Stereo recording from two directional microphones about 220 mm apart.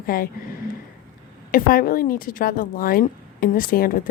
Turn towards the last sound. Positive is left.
turn(degrees=40)  # may be behind; listen again after turning